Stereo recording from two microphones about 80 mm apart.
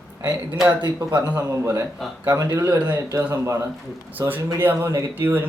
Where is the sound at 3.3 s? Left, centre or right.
Right.